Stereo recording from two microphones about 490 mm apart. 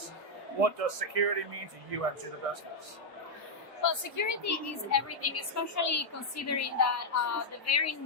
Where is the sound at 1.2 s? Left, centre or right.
Right.